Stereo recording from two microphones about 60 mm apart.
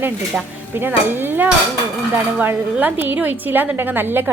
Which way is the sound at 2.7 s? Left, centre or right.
Right.